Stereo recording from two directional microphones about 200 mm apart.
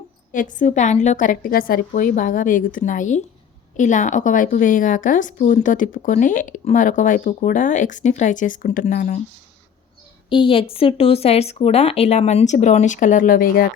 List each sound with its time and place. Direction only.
0.3 s a woman's voice: 40° left (ahead or behind)
10.2 s a woman's voice: 25° left (ahead or behind); by 13.7 s 45° left (ahead or behind)